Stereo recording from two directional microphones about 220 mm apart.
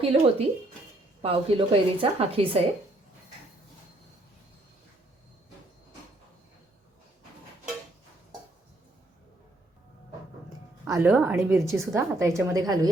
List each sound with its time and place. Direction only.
0.0 s a woman's voice: 25° right (ahead or behind)
10.8 s a woman's voice: 10° right (ahead or behind)